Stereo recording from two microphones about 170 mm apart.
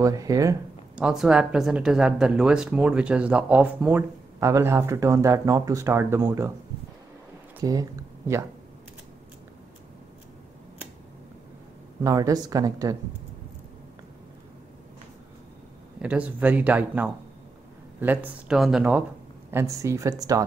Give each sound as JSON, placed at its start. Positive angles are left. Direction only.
{"t": 0.0, "sound": "speech", "side_deg": -20}
{"t": 0.9, "sound": "speech", "side_deg": -5}
{"t": 7.6, "sound": "speech", "side_deg": -20}
{"t": 12.0, "sound": "speech", "side_deg": -20}
{"t": 16.0, "sound": "speech", "side_deg": -10}
{"t": 19.5, "sound": "speech", "side_deg": -20}